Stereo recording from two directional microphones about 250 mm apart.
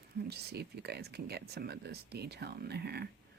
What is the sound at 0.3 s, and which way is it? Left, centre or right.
Speech, right.